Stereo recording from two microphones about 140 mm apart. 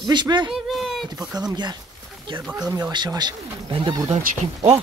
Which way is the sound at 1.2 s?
30° right (ahead or behind).